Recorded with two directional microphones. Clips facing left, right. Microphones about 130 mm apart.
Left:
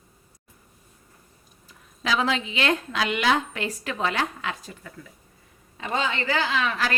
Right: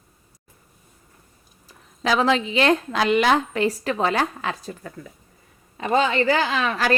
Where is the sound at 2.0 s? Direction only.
40° right (ahead or behind).